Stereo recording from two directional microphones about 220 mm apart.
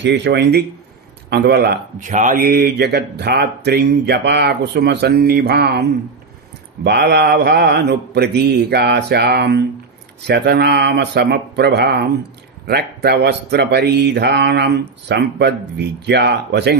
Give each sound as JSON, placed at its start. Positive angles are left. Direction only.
{"t": 0.0, "sound": "speech", "side_deg": -50}